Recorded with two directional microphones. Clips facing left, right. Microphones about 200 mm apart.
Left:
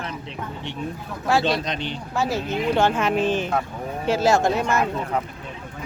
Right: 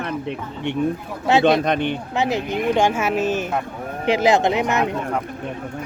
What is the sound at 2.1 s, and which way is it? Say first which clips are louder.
Speech: right 1 dB; 20° right (ahead or behind).